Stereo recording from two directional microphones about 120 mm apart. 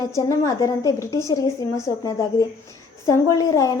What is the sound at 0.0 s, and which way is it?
A woman's voice, 25° left (ahead or behind).